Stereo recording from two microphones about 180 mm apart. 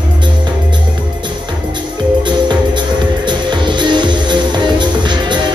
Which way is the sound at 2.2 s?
25° right (ahead or behind).